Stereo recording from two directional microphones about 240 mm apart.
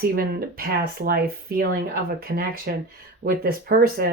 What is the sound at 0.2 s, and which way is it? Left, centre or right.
Speech, right.